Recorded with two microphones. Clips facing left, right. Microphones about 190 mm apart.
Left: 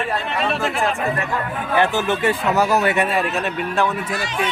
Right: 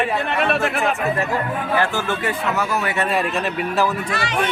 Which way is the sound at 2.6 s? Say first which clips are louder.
Left 8 dB; 40° left (ahead or behind).